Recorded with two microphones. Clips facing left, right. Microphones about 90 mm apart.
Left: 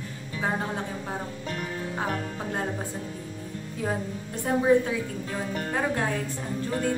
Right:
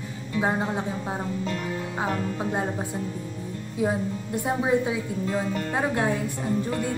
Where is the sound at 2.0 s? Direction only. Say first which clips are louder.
Right 5 dB; 20° right (ahead or behind).